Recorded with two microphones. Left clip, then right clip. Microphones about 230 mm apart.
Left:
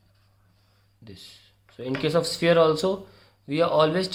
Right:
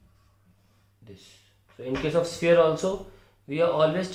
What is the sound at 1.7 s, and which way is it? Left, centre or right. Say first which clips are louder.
Speech: left 1 dB; left.